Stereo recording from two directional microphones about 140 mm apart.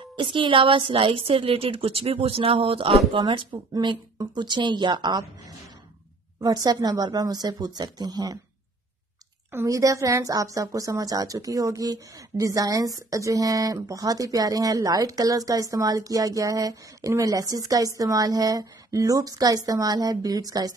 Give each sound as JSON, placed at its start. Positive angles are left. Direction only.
{"t": 0.2, "sound": "a woman's voice", "side_deg": -35}
{"t": 6.4, "sound": "a woman's voice", "side_deg": -30}
{"t": 9.5, "sound": "a woman's voice", "side_deg": -20}